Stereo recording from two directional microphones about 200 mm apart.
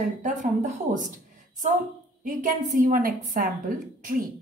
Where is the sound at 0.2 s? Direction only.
40° right (ahead or behind).